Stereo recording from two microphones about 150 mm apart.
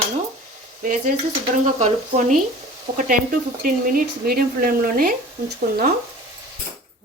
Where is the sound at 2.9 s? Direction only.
90° right.